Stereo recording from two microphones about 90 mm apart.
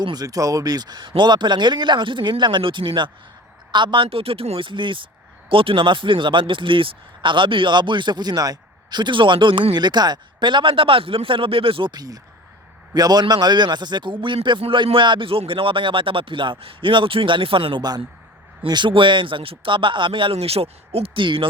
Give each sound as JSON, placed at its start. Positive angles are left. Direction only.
{"t": 0.0, "sound": "speech", "side_deg": -50}
{"t": 5.5, "sound": "speech", "side_deg": -80}
{"t": 11.9, "sound": "speech", "side_deg": -45}
{"t": 18.7, "sound": "speech", "side_deg": -65}